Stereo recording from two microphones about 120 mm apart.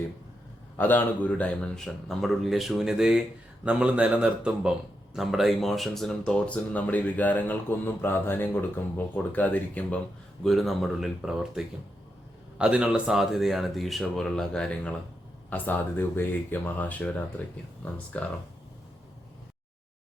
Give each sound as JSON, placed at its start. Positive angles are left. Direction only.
{"t": 0.8, "sound": "a man's voice", "side_deg": 15}
{"t": 10.4, "sound": "a man's voice", "side_deg": 0}